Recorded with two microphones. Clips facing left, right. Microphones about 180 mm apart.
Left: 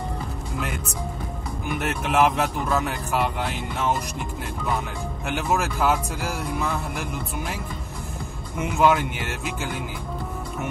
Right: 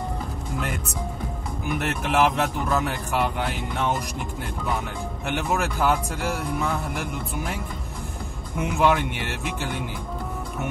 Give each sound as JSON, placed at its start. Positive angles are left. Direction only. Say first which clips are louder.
{"t": 1.8, "sound": "speech", "louder": "left 1 dB", "side_deg": 0}
{"t": 5.2, "sound": "speech", "louder": "left 1 dB", "side_deg": 0}
{"t": 8.5, "sound": "speech", "louder": "left 1 dB", "side_deg": 0}